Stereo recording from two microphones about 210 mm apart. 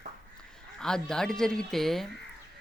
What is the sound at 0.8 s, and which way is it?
Speech, 5° left (ahead or behind).